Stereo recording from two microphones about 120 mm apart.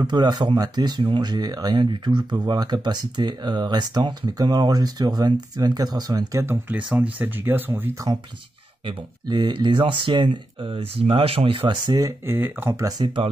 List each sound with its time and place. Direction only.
0.0 s speech: 35° right (ahead or behind)
6.4 s speech: 20° right (ahead or behind)
8.8 s speech: 40° right (ahead or behind)
12.3 s speech: 15° right (ahead or behind)
12.7 s speech: 30° right (ahead or behind)
13.0 s speech: 45° right (ahead or behind)